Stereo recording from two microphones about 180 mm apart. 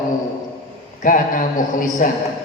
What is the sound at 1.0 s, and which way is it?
A woman's voice, 50° left (ahead or behind).